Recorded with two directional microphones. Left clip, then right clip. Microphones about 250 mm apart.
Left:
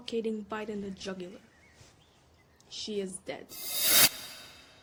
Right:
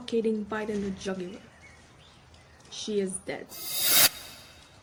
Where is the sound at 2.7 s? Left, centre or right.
Centre.